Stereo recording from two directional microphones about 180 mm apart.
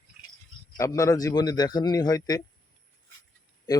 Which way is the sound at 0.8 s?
15° left (ahead or behind).